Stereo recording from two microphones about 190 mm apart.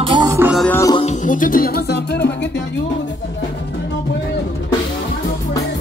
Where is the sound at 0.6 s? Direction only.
10° left (ahead or behind).